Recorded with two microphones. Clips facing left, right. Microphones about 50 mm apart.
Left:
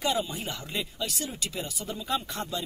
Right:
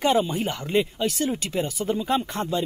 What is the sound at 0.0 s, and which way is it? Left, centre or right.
Speech, right.